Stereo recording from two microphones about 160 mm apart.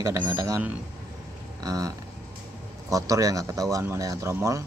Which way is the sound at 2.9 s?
20° right (ahead or behind).